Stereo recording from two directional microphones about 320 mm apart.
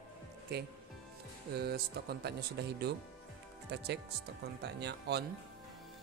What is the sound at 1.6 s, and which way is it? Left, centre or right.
Speech, right.